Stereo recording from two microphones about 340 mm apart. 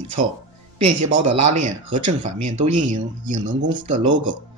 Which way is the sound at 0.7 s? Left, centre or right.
Right.